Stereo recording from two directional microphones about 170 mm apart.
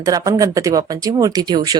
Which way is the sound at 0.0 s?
20° right (ahead or behind).